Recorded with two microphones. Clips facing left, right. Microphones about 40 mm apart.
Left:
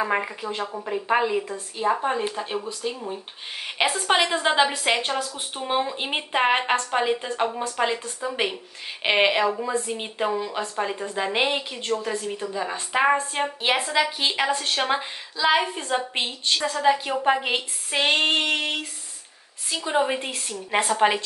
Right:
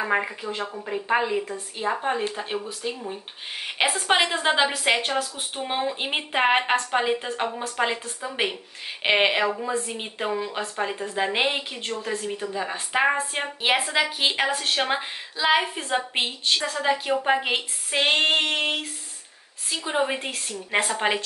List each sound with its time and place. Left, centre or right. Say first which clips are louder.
0.0 s a woman's voice: even; centre
16.8 s a woman's voice: left 4 dB; centre
19.8 s speech: left 2 dB; centre
20.1 s a woman's voice: left 1 dB; centre